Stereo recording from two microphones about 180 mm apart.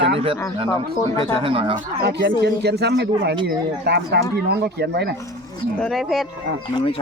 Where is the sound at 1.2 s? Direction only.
30° right (ahead or behind).